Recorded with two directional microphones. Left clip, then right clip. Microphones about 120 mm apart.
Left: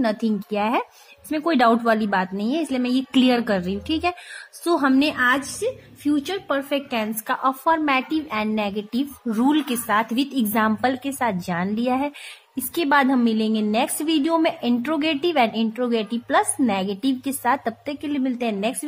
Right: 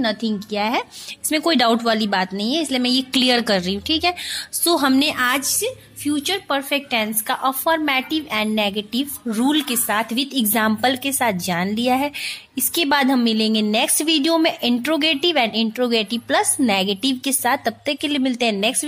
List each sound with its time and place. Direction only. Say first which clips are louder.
0.0 s a woman's voice: right 1 dB; 5° left (ahead or behind)
0.6 s a woman's voice: right 1 dB; 10° right (ahead or behind)
1.3 s a woman's voice: right 1 dB; 25° right (ahead or behind); by 2.9 s 10° right (ahead or behind)
2.9 s a woman's voice: right 2 dB; 25° right (ahead or behind)